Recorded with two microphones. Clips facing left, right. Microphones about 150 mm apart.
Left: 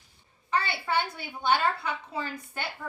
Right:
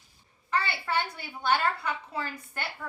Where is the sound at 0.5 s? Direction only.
20° left (ahead or behind).